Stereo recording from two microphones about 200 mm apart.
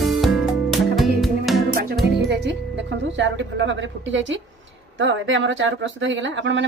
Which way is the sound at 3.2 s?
65° right (ahead or behind).